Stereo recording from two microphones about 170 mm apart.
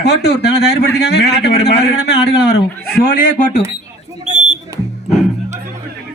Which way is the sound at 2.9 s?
55° left (ahead or behind).